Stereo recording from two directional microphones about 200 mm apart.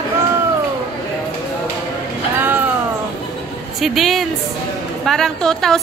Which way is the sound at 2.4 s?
10° right (ahead or behind).